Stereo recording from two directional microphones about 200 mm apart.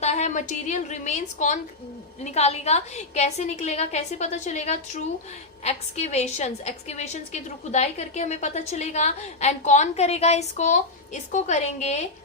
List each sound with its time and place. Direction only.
0.0 s a woman's voice: 35° left (ahead or behind)